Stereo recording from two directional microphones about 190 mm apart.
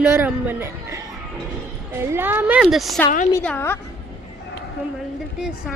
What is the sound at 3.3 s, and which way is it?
Speech, 10° left (ahead or behind).